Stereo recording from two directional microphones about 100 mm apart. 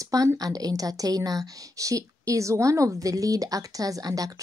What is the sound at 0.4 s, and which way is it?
A woman's voice, 40° right (ahead or behind).